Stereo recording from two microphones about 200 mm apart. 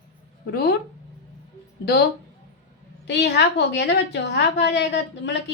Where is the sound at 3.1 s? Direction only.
60° left (ahead or behind).